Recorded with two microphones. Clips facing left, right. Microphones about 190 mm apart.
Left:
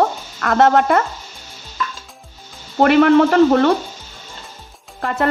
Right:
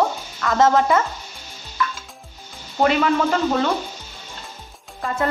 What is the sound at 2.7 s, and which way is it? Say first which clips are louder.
Speech: left 7 dB; 65° left (ahead or behind).